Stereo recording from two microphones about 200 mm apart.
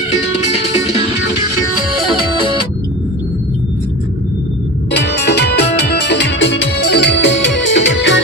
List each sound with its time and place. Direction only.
4.9 s music: 60° left (ahead or behind)